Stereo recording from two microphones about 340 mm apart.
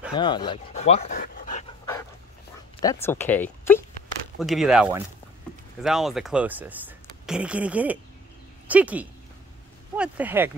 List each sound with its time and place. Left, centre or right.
0.1 s speech: centre
2.8 s speech: centre